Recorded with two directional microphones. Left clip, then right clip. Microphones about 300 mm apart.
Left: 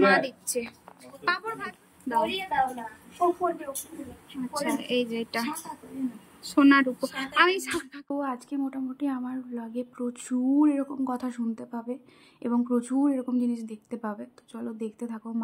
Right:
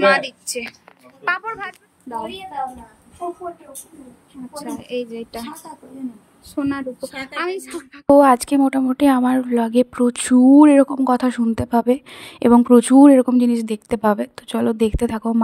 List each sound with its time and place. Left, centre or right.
0.0 s speech: centre
4.6 s speech: centre
6.5 s speech: centre
8.2 s a woman's voice: right